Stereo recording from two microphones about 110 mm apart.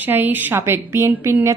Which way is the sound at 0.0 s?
15° right (ahead or behind).